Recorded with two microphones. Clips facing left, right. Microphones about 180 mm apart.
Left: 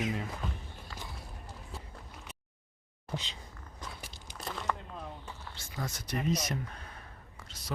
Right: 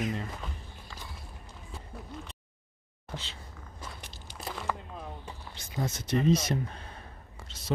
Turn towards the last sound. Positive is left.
turn(degrees=-25)  # may be behind; listen again after turning